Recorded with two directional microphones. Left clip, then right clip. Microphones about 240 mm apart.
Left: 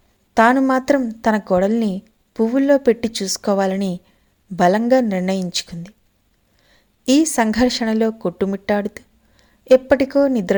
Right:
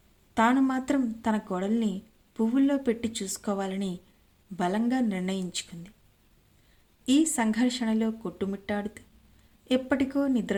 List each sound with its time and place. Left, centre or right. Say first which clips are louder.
0.3 s a woman's voice: left 11 dB; left
7.0 s a woman's voice: left 9 dB; left